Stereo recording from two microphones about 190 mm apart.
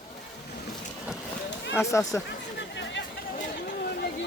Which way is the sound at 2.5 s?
65° left (ahead or behind).